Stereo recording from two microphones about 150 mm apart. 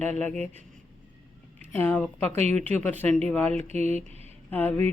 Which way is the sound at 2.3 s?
50° right (ahead or behind).